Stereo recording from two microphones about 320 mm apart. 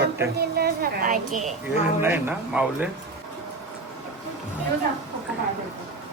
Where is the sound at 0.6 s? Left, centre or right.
Right.